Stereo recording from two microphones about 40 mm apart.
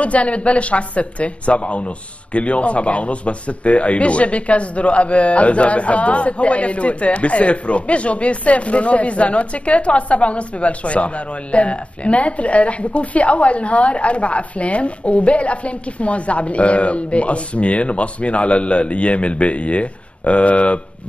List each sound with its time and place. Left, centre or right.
0.0 s a man's voice: left